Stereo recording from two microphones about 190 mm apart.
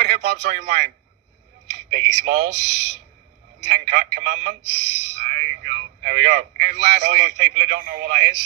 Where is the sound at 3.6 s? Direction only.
50° right (ahead or behind).